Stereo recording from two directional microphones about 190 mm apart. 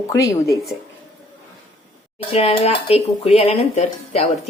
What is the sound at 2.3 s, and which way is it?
Speech, 30° left (ahead or behind).